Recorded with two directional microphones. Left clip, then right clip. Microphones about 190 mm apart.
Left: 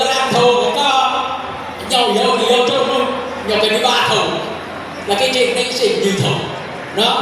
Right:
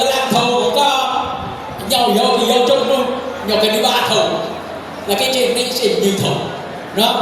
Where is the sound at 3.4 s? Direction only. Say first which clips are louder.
Even; 50° right (ahead or behind).